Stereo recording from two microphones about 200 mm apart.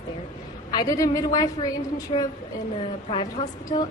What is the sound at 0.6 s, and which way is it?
A woman's voice, 20° left (ahead or behind).